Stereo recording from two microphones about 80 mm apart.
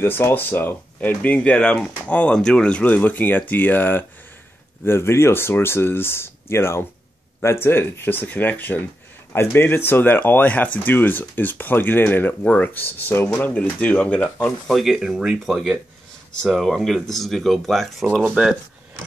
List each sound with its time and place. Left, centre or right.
0.0 s speech: left
14.7 s speech: centre